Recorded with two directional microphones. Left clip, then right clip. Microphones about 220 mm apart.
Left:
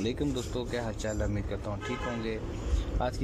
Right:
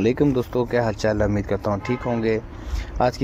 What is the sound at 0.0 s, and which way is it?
Speech, 5° right (ahead or behind).